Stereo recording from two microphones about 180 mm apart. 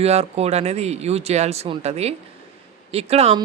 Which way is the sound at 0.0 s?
35° right (ahead or behind).